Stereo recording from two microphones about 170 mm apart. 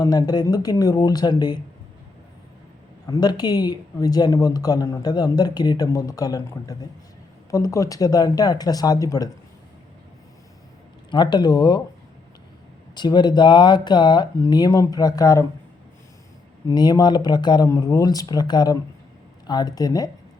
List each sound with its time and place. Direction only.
0.0 s speech: 20° left (ahead or behind)
3.1 s speech: 25° left (ahead or behind)
11.1 s speech: 25° left (ahead or behind)
12.9 s speech: 25° left (ahead or behind)
16.6 s speech: 25° left (ahead or behind)